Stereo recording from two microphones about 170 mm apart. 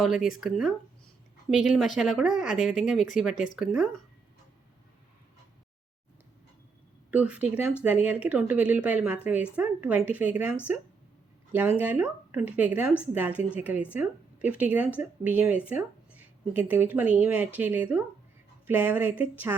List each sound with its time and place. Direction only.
0.0 s speech: 5° right (ahead or behind)
7.1 s speech: 10° right (ahead or behind)
11.8 s speech: 10° right (ahead or behind)